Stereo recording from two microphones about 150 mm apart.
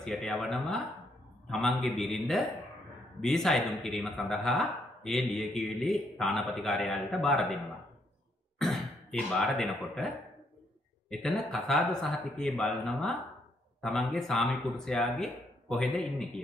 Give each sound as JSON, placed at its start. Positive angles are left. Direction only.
{"t": 0.0, "sound": "speech", "side_deg": 5}
{"t": 8.6, "sound": "throat clearing", "side_deg": 0}
{"t": 9.4, "sound": "speech", "side_deg": 5}